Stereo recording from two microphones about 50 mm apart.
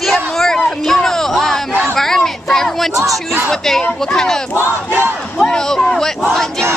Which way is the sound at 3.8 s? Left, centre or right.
Centre.